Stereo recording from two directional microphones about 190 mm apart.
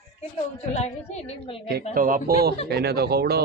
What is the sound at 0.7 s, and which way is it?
Speech, 35° left (ahead or behind).